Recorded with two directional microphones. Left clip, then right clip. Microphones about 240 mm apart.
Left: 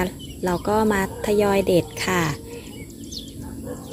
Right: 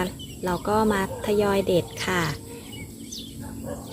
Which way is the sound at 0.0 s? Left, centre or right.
Centre.